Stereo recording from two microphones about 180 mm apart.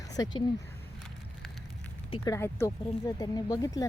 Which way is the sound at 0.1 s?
20° left (ahead or behind).